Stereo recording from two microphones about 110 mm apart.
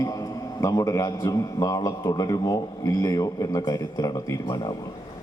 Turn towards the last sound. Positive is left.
turn(degrees=35)  # may be behind; listen again after turning